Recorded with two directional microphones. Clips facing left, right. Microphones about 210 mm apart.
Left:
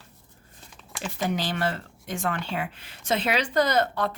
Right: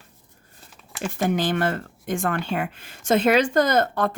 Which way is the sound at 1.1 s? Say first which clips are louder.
Right 5 dB; 50° right (ahead or behind).